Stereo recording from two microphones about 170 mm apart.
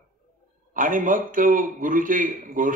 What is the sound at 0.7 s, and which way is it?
A man's voice, 50° right (ahead or behind).